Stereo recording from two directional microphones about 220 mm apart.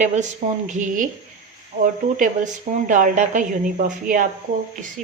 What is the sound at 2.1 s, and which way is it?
Speech, 35° right (ahead or behind).